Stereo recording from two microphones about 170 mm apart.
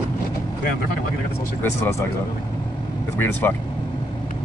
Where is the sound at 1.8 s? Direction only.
15° left (ahead or behind).